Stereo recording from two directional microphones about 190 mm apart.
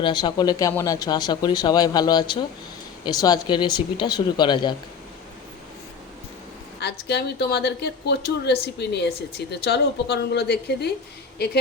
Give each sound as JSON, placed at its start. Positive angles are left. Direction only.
{"t": 0.0, "sound": "speech", "side_deg": 25}
{"t": 6.7, "sound": "a woman's voice", "side_deg": 60}